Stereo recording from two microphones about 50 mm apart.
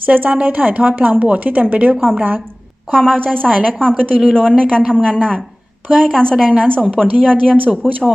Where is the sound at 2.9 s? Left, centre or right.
Centre.